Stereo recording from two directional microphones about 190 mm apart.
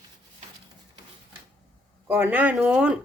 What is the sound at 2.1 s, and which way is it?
Speech, 10° right (ahead or behind).